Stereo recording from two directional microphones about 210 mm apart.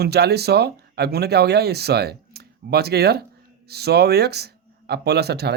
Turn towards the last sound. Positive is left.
turn(degrees=-50)  # may be behind; listen again after turning